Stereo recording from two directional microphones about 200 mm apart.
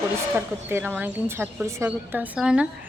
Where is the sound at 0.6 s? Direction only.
10° right (ahead or behind).